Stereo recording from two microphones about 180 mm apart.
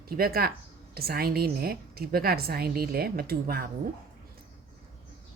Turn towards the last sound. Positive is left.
turn(degrees=-55)  # may be behind; listen again after turning